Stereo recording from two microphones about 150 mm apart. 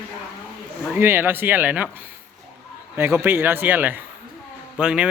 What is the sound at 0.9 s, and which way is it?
Speech, 15° right (ahead or behind).